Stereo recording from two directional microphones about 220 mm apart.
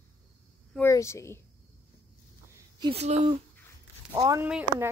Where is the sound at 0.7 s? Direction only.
10° left (ahead or behind).